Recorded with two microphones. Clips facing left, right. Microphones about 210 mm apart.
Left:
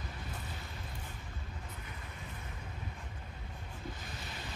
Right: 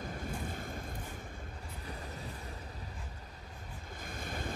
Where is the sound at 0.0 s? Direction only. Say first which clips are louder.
Right 6 dB; 50° right (ahead or behind).